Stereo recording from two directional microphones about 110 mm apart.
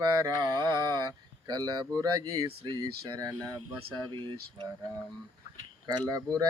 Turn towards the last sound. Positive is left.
turn(degrees=-35)  # may be behind; listen again after turning